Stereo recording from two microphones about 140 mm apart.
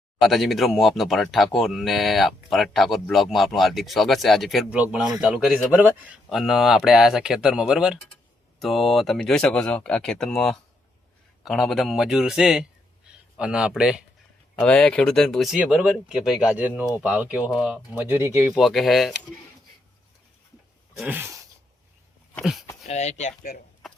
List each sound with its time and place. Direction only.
0.2 s a man's voice: centre (ahead or behind)
14.6 s a man's voice: 5° left (ahead or behind)
17.9 s a man's voice: 15° right (ahead or behind)
18.5 s speech: centre (ahead or behind)
21.1 s a sound: 15° right (ahead or behind)
22.4 s speech: centre (ahead or behind)
22.9 s speech: 55° left (ahead or behind)
23.4 s speech: 90° left